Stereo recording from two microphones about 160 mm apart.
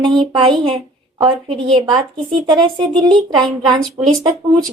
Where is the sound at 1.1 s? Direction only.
30° right (ahead or behind).